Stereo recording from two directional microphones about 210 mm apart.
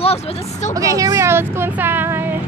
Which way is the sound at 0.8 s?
15° right (ahead or behind).